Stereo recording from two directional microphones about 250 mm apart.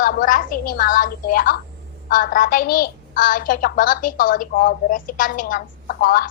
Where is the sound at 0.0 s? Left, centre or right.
Left.